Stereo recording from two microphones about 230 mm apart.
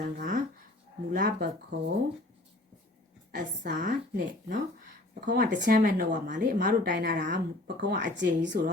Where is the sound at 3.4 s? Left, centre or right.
Right.